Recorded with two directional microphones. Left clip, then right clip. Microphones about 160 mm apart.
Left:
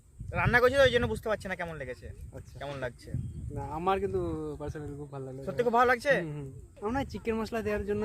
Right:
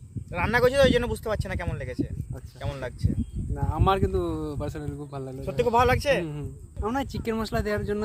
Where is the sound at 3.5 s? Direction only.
20° right (ahead or behind); by 5.4 s 45° right (ahead or behind).